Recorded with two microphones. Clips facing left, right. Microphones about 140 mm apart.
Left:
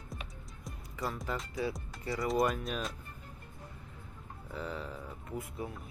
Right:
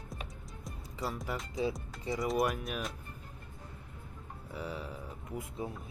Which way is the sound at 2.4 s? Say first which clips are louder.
Left 1 dB; 5° right (ahead or behind).